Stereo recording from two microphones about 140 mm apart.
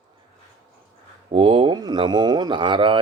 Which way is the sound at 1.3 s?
40° right (ahead or behind).